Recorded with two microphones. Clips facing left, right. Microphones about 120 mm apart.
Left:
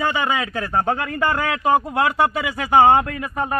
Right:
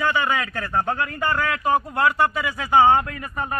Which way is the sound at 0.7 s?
45° left (ahead or behind).